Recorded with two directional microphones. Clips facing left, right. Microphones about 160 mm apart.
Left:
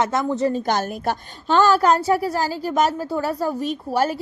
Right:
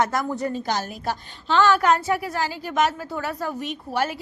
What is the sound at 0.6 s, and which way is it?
A woman's voice, 55° left (ahead or behind).